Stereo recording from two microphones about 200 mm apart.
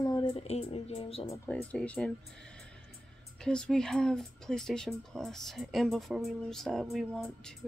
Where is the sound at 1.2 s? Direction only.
15° left (ahead or behind).